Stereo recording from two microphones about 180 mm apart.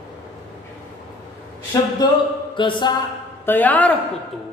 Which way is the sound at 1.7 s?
20° left (ahead or behind).